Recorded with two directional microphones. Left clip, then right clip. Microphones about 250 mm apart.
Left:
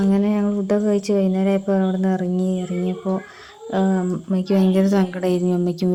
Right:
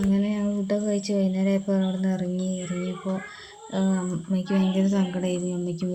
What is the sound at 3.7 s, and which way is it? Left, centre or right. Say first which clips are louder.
Speech: left 7 dB; left.